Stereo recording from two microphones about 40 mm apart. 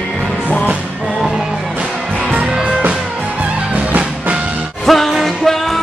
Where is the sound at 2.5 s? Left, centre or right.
Centre.